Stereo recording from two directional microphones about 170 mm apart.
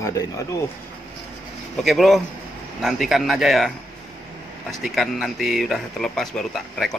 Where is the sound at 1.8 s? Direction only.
Centre (ahead or behind).